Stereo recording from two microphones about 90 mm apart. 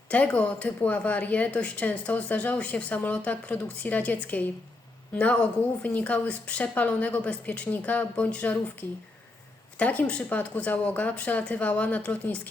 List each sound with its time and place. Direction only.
0.1 s speech: 15° left (ahead or behind)